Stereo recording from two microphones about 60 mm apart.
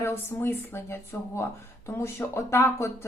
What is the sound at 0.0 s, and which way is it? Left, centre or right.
A woman's voice, left.